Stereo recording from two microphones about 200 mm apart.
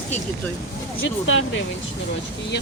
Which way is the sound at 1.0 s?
75° left (ahead or behind).